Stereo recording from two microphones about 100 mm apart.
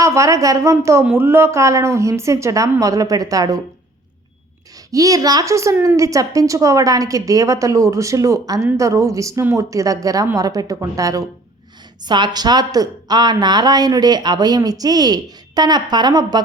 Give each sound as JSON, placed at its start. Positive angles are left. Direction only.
{"t": 0.0, "sound": "a woman's voice", "side_deg": -30}
{"t": 4.9, "sound": "a woman's voice", "side_deg": -35}
{"t": 12.0, "sound": "a woman's voice", "side_deg": -50}